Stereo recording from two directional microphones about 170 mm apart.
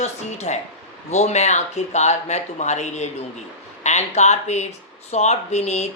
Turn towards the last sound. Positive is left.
turn(degrees=40)  # may be behind; listen again after turning